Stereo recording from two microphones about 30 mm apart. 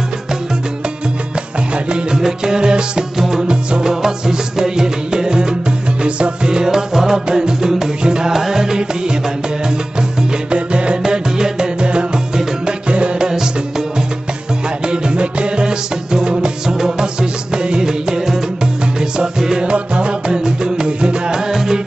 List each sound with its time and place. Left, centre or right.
2.1 s music: centre
3.2 s music: centre
6.0 s music: right
6.6 s music: centre
8.3 s music: centre
10.5 s music: right
11.0 s music: right
13.3 s music: centre
14.9 s music: right; by 18.4 s centre
19.6 s music: right
20.4 s music: right
21.3 s music: centre